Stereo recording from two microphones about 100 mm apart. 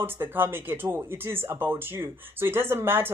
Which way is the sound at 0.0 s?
20° right (ahead or behind).